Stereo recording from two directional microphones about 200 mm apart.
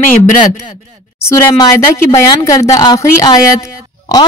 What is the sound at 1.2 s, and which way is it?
A woman's voice, 15° left (ahead or behind).